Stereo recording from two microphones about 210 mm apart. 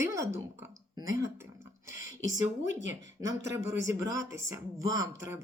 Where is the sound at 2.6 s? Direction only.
35° left (ahead or behind).